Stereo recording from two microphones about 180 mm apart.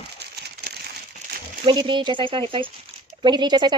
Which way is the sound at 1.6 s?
25° right (ahead or behind).